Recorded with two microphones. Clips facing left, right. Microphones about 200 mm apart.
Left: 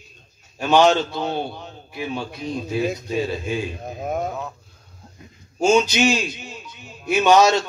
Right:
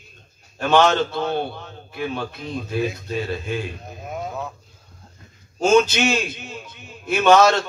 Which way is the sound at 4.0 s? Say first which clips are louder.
Left 6 dB; 45° left (ahead or behind).